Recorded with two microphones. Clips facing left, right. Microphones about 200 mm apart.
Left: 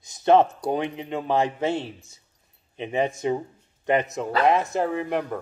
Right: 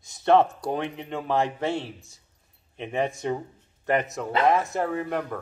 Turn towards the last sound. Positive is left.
turn(degrees=0)  # may be behind; listen again after turning